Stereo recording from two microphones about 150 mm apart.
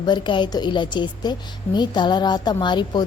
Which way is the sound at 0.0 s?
30° left (ahead or behind).